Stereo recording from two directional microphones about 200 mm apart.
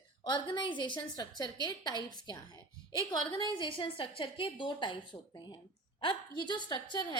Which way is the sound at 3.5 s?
25° left (ahead or behind).